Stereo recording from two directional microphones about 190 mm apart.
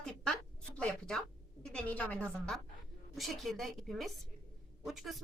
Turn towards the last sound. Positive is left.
turn(degrees=0)  # may be behind; listen again after turning